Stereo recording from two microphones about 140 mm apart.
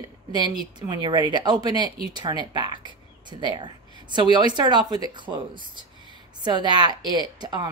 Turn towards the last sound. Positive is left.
turn(degrees=-30)  # may be behind; listen again after turning